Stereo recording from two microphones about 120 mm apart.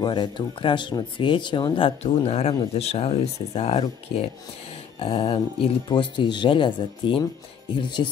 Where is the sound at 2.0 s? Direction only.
65° left (ahead or behind).